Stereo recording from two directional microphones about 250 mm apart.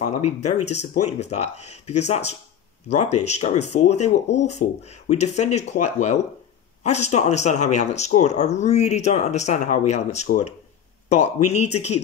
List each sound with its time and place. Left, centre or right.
0.0 s speech: left